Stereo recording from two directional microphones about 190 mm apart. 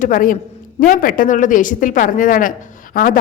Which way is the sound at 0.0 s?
45° left (ahead or behind).